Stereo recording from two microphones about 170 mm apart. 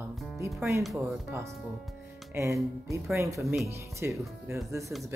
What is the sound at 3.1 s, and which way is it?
Speech, 15° right (ahead or behind).